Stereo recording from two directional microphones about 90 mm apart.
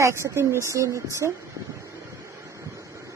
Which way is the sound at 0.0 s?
30° right (ahead or behind).